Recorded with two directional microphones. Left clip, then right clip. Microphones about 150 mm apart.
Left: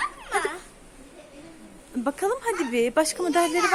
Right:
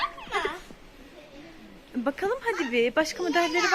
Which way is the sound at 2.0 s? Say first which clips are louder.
Left 2 dB; 15° left (ahead or behind).